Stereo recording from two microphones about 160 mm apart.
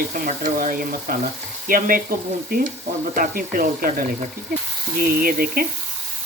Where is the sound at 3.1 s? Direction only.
60° right (ahead or behind).